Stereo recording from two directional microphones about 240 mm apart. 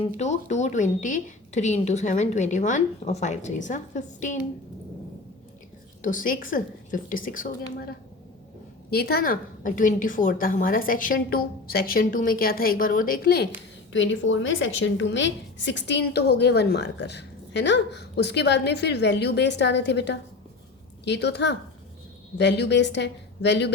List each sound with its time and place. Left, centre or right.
0.2 s a woman's voice: left
6.0 s a woman's voice: left
8.9 s a woman's voice: left